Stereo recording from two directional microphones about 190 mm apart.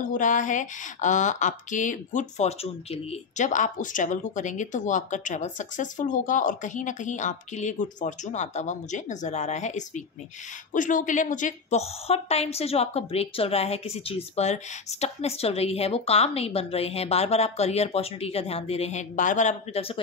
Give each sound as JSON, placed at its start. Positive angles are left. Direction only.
{"t": 0.0, "sound": "speech", "side_deg": 45}